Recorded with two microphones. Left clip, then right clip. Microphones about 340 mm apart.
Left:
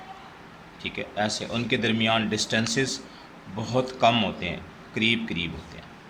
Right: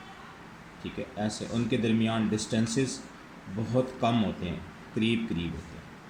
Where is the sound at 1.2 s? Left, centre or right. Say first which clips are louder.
Left 6 dB; left.